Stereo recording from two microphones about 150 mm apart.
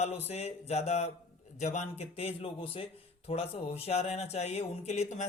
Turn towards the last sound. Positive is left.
turn(degrees=50)  # may be behind; listen again after turning